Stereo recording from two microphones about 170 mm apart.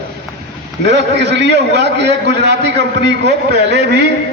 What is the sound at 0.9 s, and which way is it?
A man's voice, 90° right.